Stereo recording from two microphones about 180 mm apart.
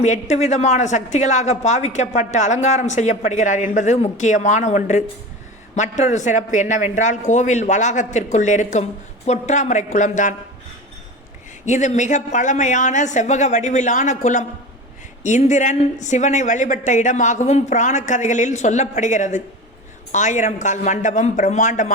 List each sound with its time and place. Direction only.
0.0 s a woman's voice: 40° left (ahead or behind)
11.6 s a woman's voice: 40° left (ahead or behind)